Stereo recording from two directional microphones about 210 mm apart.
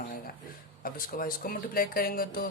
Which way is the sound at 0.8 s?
40° left (ahead or behind).